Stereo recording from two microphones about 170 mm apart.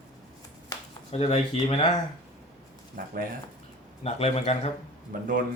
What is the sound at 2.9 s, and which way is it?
Speech, 55° right (ahead or behind).